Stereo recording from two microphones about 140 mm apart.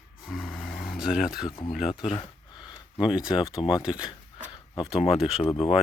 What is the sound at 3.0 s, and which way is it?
Speech, 5° right (ahead or behind).